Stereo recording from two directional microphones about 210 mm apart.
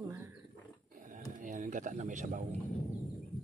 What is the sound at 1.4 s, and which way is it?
Speech, 35° right (ahead or behind).